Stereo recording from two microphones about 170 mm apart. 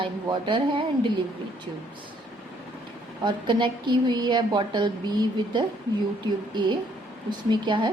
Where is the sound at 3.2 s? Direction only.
30° right (ahead or behind).